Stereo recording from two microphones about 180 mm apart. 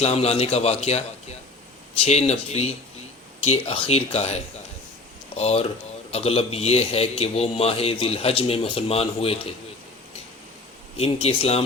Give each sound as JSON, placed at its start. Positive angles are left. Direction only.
{"t": 0.0, "sound": "a man's voice", "side_deg": 35}
{"t": 10.9, "sound": "a man's voice", "side_deg": 35}